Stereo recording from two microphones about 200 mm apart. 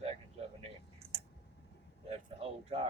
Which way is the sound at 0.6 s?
30° right (ahead or behind).